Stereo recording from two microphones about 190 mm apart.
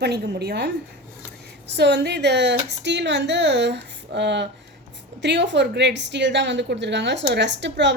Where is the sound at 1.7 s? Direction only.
65° right (ahead or behind).